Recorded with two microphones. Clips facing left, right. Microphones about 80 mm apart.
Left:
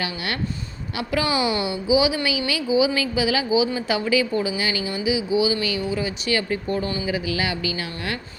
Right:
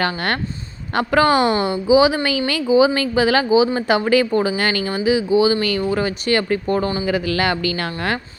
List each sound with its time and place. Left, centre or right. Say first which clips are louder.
0.0 s speech: right 6 dB; right